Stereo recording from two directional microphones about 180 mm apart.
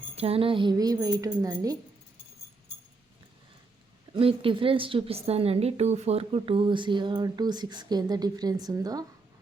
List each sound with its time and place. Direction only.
0.2 s a woman's voice: 30° right (ahead or behind)
4.1 s a woman's voice: 30° right (ahead or behind)